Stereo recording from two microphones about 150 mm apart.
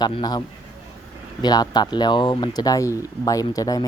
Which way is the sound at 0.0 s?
30° left (ahead or behind).